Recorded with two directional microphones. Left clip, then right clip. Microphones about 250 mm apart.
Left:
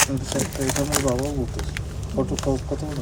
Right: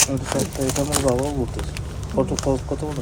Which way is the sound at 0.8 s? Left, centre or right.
Right.